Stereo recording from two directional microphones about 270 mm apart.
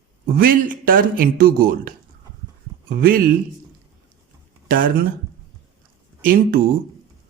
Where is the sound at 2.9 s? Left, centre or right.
Right.